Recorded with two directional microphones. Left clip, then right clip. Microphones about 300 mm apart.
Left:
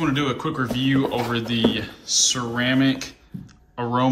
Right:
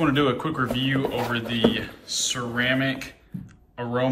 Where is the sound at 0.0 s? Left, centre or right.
Centre.